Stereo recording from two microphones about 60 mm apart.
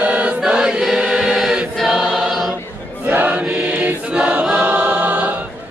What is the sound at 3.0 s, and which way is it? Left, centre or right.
Choir, right.